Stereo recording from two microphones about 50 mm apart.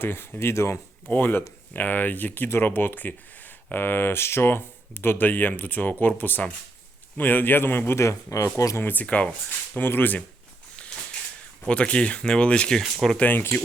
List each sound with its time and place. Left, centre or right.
0.0 s speech: left
1.1 s speech: left
7.9 s speech: left
8.8 s speech: left
9.0 s speech: left
9.7 s speech: left
11.7 s speech: left
12.8 s speech: centre
13.1 s speech: left